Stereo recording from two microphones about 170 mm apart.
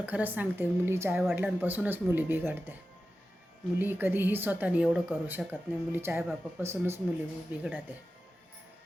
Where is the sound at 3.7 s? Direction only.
10° right (ahead or behind).